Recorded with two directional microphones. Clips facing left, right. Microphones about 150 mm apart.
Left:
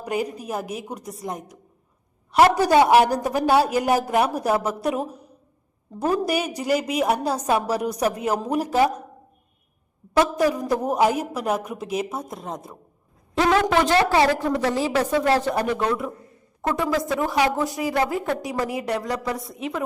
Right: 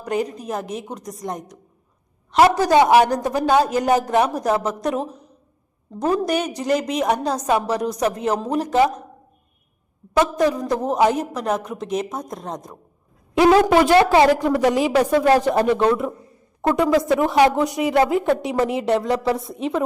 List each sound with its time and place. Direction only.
0.0 s a woman's voice: 10° left (ahead or behind)
2.6 s a woman's voice: 10° left (ahead or behind)
10.2 s a woman's voice: 10° left (ahead or behind)
13.3 s a woman's voice: 15° right (ahead or behind)